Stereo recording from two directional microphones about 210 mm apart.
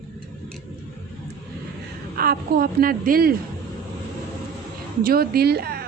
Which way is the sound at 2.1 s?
45° right (ahead or behind).